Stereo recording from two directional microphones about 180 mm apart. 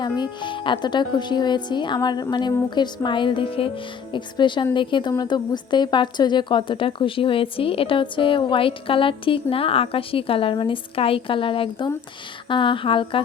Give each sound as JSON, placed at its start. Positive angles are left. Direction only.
{"t": 0.0, "sound": "a woman's voice", "side_deg": 25}